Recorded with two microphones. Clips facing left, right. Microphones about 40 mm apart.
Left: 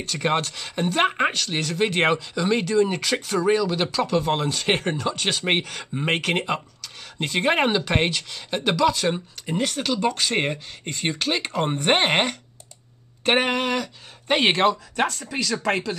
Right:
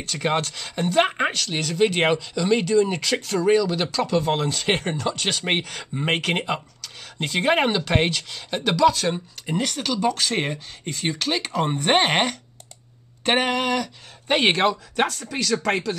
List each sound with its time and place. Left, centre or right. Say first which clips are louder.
0.0 s speech: even; centre
14.2 s speech: even; centre